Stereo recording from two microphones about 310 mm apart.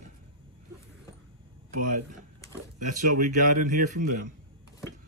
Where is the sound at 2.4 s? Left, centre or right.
Centre.